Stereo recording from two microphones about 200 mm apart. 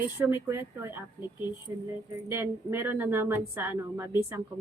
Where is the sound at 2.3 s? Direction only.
10° right (ahead or behind).